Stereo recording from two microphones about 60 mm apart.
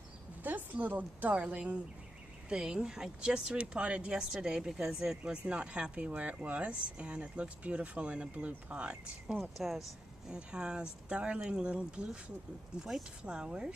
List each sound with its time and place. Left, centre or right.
0.4 s speech: right
9.4 s speech: centre
10.3 s speech: centre